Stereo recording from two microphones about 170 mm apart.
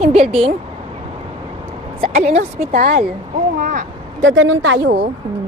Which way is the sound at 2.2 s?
40° right (ahead or behind).